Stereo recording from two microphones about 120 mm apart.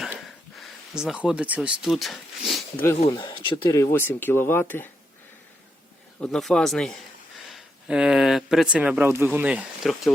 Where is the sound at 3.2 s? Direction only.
40° left (ahead or behind).